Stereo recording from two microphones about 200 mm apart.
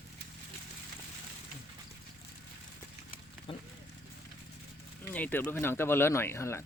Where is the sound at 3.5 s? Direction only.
25° left (ahead or behind).